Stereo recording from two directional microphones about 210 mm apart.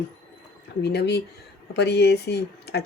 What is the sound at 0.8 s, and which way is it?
Speech, 50° left (ahead or behind).